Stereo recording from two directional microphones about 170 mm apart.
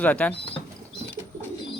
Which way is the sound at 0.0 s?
10° left (ahead or behind).